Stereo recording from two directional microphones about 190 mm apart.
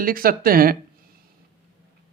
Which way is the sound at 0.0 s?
50° right (ahead or behind).